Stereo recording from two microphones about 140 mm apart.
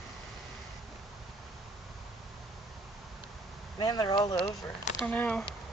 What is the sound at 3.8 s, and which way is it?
Speech, 30° left (ahead or behind).